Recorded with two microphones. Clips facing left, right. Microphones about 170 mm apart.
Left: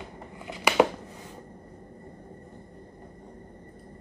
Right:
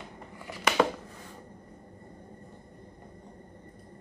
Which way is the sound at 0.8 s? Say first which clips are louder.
Left 4 dB; 15° left (ahead or behind).